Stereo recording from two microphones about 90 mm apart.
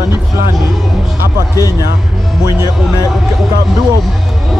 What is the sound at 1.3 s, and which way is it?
Speech, 40° left (ahead or behind).